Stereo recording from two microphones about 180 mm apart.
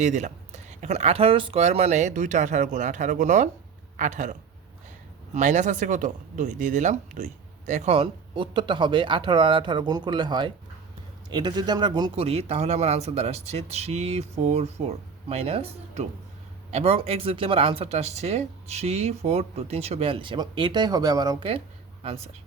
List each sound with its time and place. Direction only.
0.0 s speech: 40° right (ahead or behind); by 21.6 s 25° right (ahead or behind)